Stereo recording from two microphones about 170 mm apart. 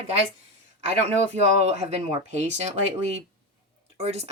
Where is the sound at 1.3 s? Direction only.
40° right (ahead or behind).